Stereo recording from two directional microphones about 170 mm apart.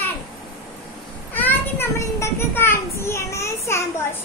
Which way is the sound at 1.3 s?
10° left (ahead or behind).